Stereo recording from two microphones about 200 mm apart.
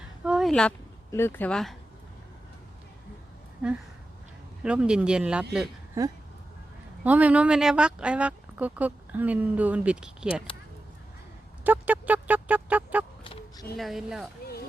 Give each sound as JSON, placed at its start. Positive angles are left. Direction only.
{"t": 0.3, "sound": "a sound", "side_deg": 0}
{"t": 1.1, "sound": "speech", "side_deg": 10}
{"t": 4.6, "sound": "speech", "side_deg": -5}
{"t": 7.0, "sound": "speech", "side_deg": -5}
{"t": 11.6, "sound": "speech", "side_deg": -10}
{"t": 13.2, "sound": "a sound", "side_deg": 25}
{"t": 13.7, "sound": "speech", "side_deg": 0}